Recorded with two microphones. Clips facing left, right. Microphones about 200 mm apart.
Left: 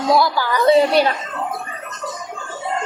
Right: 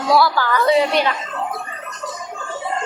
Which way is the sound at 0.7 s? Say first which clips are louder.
Left 4 dB; 35° left (ahead or behind).